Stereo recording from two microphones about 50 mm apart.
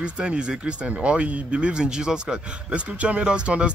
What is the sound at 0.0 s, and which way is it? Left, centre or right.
Speech, right.